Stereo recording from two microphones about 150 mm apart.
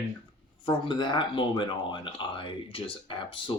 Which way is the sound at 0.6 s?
30° left (ahead or behind).